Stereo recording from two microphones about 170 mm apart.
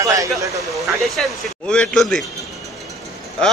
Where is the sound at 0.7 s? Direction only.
Centre (ahead or behind).